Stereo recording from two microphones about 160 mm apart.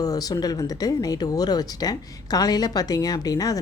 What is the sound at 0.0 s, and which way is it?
Speech, 25° left (ahead or behind).